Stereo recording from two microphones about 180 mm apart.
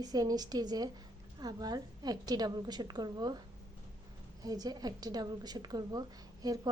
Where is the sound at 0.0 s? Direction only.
20° right (ahead or behind).